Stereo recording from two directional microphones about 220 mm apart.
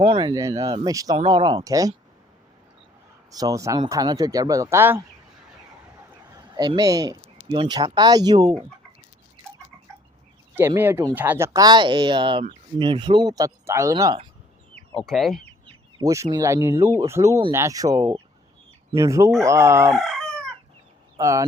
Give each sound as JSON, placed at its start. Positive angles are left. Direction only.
{"t": 0.0, "sound": "speech", "side_deg": -25}
{"t": 3.3, "sound": "speech", "side_deg": -15}
{"t": 6.3, "sound": "speech", "side_deg": -20}
{"t": 10.5, "sound": "speech", "side_deg": -10}
{"t": 15.0, "sound": "speech", "side_deg": 0}
{"t": 15.6, "sound": "chicken", "side_deg": -20}
{"t": 16.3, "sound": "speech", "side_deg": -15}
{"t": 20.0, "sound": "chicken", "side_deg": 0}
{"t": 21.2, "sound": "speech", "side_deg": -15}